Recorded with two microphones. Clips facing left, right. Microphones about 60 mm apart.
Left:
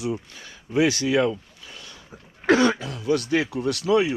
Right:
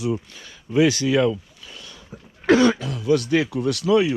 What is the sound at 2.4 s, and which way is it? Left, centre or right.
Speech, left.